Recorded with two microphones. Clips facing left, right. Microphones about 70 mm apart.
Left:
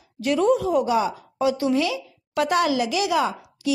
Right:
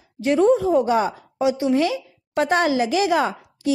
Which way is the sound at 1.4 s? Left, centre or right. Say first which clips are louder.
Right 2 dB; right.